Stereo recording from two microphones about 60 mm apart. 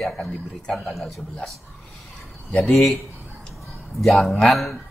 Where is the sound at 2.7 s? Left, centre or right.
Centre.